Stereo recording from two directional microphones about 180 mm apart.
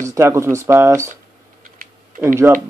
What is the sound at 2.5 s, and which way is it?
Speech, 15° right (ahead or behind).